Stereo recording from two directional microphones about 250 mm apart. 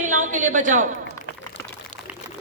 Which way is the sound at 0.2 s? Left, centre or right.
Right.